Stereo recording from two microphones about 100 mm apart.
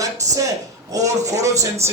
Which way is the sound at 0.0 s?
35° right (ahead or behind).